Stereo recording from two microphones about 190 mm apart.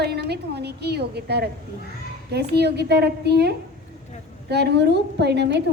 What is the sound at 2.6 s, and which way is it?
A woman's voice, 60° right (ahead or behind).